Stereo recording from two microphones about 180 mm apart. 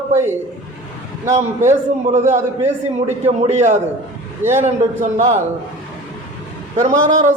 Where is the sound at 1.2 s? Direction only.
40° right (ahead or behind).